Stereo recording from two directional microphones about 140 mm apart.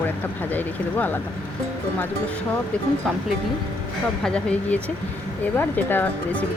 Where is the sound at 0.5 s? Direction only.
15° left (ahead or behind).